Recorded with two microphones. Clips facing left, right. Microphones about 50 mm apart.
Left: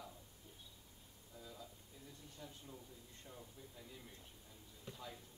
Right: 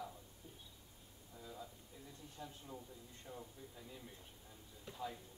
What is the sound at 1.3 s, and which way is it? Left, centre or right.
A man's voice, centre.